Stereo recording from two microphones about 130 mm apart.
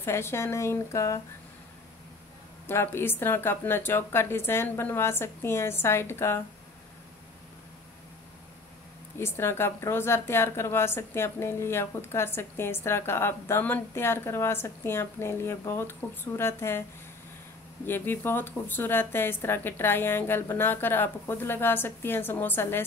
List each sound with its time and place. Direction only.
0.0 s a woman's voice: 20° left (ahead or behind)
2.6 s a woman's voice: 20° left (ahead or behind)
9.2 s a woman's voice: 20° left (ahead or behind)
17.8 s speech: 15° left (ahead or behind)